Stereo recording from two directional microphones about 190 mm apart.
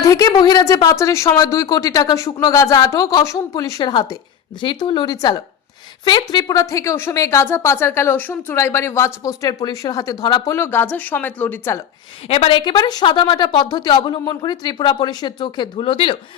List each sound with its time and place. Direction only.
0.0 s a woman's voice: 20° left (ahead or behind)
12.3 s speech: 30° left (ahead or behind)